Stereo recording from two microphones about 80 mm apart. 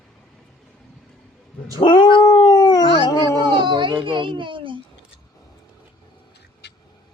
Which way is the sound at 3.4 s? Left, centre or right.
Right.